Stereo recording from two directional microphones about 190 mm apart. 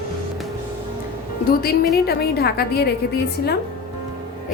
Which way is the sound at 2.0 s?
55° left (ahead or behind).